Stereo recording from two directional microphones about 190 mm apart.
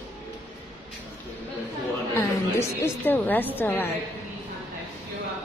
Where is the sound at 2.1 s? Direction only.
15° left (ahead or behind).